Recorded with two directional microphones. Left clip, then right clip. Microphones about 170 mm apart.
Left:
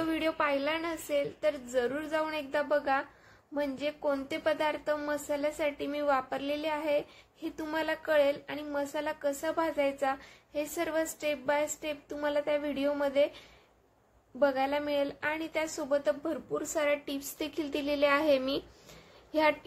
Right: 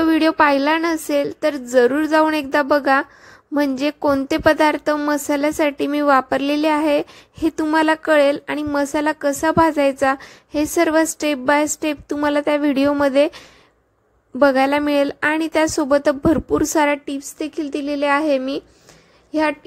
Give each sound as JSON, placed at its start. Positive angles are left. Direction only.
{"t": 0.0, "sound": "a woman's voice", "side_deg": -60}
{"t": 14.4, "sound": "a woman's voice", "side_deg": -65}
{"t": 17.0, "sound": "speech", "side_deg": -35}